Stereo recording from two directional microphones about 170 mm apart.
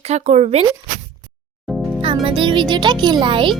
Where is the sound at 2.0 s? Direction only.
30° right (ahead or behind).